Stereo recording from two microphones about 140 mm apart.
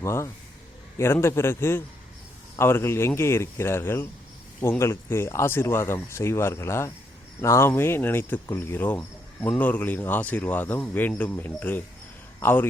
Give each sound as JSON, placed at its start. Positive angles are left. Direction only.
{"t": 0.0, "sound": "speech", "side_deg": 20}